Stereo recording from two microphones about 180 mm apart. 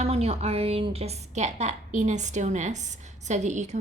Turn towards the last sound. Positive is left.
turn(degrees=-40)  # may be behind; listen again after turning